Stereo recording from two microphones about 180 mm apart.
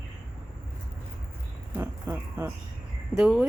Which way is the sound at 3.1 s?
5° right (ahead or behind).